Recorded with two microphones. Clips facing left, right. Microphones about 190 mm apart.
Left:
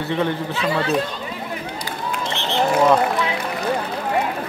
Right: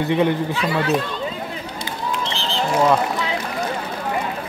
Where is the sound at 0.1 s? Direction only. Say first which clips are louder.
Right 3 dB; 15° right (ahead or behind).